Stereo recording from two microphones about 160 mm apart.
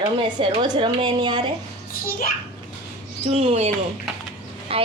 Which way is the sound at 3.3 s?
40° right (ahead or behind).